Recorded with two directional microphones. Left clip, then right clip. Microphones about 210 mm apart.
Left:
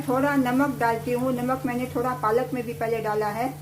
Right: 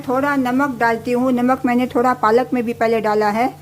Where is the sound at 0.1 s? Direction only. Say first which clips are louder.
Right 5 dB; 30° right (ahead or behind).